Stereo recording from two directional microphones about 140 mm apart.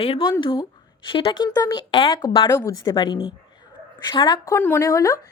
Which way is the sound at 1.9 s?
40° left (ahead or behind).